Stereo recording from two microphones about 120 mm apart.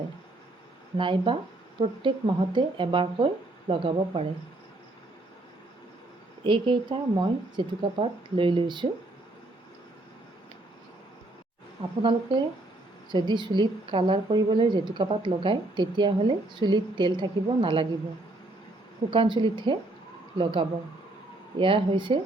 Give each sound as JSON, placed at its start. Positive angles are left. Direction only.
{"t": 0.9, "sound": "speech", "side_deg": -45}
{"t": 6.4, "sound": "speech", "side_deg": -45}
{"t": 11.8, "sound": "speech", "side_deg": -50}
{"t": 13.1, "sound": "a woman's voice", "side_deg": -40}
{"t": 19.1, "sound": "speech", "side_deg": -45}